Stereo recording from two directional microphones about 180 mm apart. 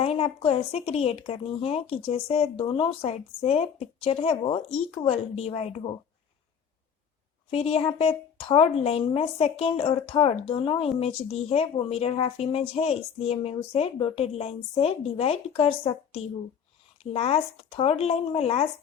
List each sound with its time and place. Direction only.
0.0 s speech: 35° left (ahead or behind)
7.5 s speech: 35° left (ahead or behind)